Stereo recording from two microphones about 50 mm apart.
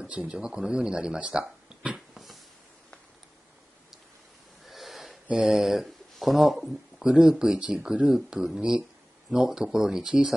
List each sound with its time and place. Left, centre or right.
0.1 s speech: right
0.4 s speech: centre
2.0 s dog: centre
4.6 s wheeze: centre
5.4 s speech: centre
7.0 s speech: centre